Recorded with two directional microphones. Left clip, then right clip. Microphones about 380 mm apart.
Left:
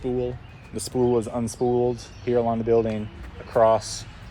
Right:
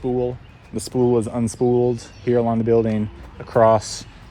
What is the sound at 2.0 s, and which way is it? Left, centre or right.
Speech, right.